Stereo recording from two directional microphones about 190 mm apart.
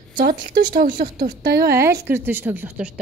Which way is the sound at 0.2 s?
50° right (ahead or behind).